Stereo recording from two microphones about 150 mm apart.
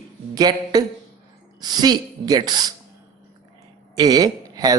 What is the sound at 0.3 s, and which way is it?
A man's voice, 25° right (ahead or behind).